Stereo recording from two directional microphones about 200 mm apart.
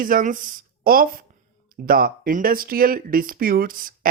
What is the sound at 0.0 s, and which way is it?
Speech, 40° right (ahead or behind).